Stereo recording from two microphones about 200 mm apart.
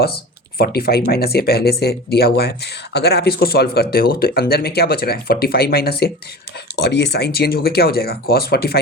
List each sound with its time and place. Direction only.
0.6 s speech: 50° left (ahead or behind)